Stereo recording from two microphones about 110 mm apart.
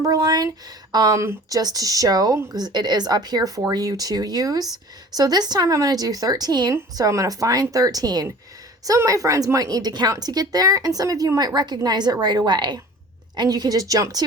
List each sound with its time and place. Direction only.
0.0 s a woman's voice: 35° right (ahead or behind)